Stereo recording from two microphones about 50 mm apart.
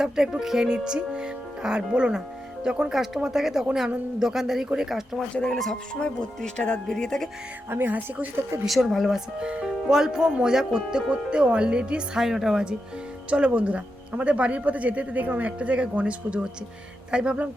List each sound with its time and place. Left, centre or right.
0.0 s speech: centre
5.3 s speech: centre
7.9 s a woman's voice: right
8.6 s a woman's voice: centre
9.1 s speech: centre
13.3 s speech: right